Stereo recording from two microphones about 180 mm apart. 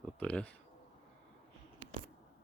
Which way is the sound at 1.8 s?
45° right (ahead or behind).